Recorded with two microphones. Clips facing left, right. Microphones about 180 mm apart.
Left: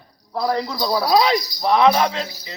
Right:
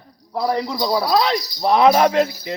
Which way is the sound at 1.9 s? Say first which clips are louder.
Right 5 dB; 50° right (ahead or behind).